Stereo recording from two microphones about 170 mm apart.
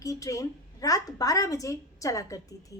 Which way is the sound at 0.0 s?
20° left (ahead or behind).